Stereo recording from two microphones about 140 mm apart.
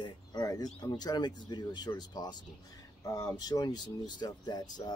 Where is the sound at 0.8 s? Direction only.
30° left (ahead or behind).